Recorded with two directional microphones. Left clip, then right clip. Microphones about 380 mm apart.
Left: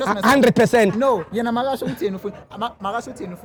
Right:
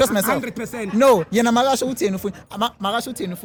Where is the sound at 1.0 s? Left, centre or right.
Right.